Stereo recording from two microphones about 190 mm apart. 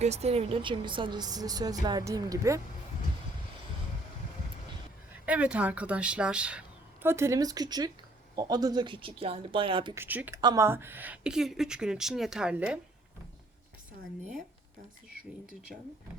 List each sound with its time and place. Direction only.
0.0 s a woman's voice: 35° right (ahead or behind); by 2.6 s 15° right (ahead or behind)
5.2 s a woman's voice: 5° right (ahead or behind); by 9.9 s 25° right (ahead or behind)
9.9 s a woman's voice: 10° right (ahead or behind)